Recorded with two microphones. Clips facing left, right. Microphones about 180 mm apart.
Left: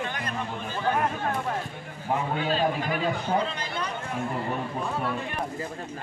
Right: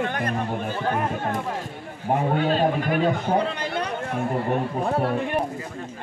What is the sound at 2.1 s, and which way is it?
A man's voice, 50° right (ahead or behind).